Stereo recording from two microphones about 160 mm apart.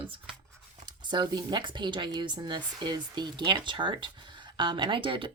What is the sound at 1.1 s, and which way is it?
Speech, 25° right (ahead or behind).